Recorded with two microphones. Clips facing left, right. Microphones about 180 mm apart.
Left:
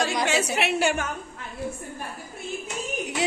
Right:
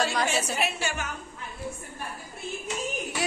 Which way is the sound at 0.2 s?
70° left (ahead or behind).